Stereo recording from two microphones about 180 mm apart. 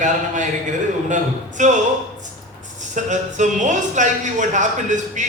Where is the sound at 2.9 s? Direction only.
45° right (ahead or behind).